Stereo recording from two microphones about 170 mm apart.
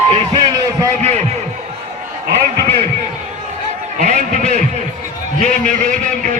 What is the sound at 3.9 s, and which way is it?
Speech, 45° right (ahead or behind).